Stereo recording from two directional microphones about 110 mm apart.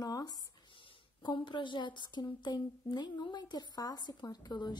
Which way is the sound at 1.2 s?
45° left (ahead or behind).